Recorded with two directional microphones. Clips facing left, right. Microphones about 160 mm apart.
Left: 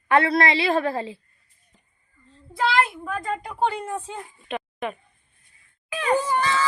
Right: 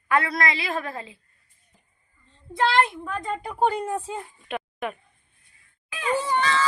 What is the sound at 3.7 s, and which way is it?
Speech, 10° right (ahead or behind).